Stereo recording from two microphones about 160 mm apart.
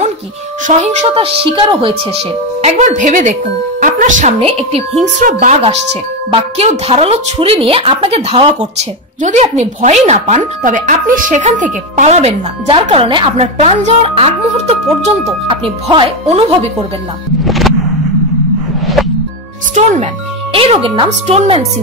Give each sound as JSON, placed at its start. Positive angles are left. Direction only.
{"t": 0.7, "sound": "a woman's voice", "side_deg": -45}
{"t": 3.8, "sound": "music", "side_deg": -50}
{"t": 4.4, "sound": "a woman's voice", "side_deg": -35}
{"t": 17.5, "sound": "a sound", "side_deg": 0}
{"t": 19.7, "sound": "speech", "side_deg": -50}
{"t": 20.5, "sound": "a woman's voice", "side_deg": -35}